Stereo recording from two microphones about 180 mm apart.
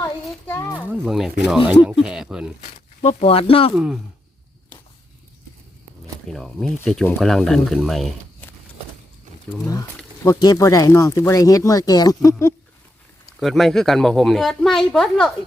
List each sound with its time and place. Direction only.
0.0 s a sound: 10° left (ahead or behind)
0.9 s a woman's voice: centre (ahead or behind)
3.0 s speech: 35° left (ahead or behind)
3.8 s a woman's voice: centre (ahead or behind)
6.2 s a woman's voice: centre (ahead or behind)
10.2 s speech: 20° left (ahead or behind)
13.4 s a woman's voice: centre (ahead or behind)